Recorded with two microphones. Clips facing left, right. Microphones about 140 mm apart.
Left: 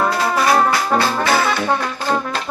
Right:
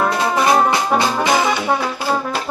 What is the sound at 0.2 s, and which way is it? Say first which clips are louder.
Music: right 2 dB; 20° right (ahead or behind).